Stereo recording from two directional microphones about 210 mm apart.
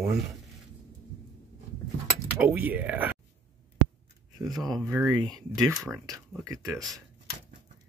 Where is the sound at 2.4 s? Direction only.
10° right (ahead or behind).